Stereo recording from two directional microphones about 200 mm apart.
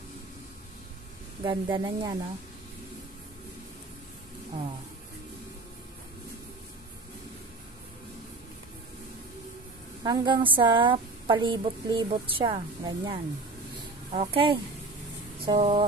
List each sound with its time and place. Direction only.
1.4 s a woman's voice: 25° right (ahead or behind)
10.0 s a woman's voice: 25° right (ahead or behind)